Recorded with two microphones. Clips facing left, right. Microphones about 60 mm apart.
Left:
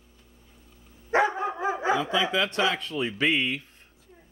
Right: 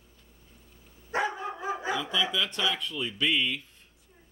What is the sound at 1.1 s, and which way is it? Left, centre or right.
Dog, left.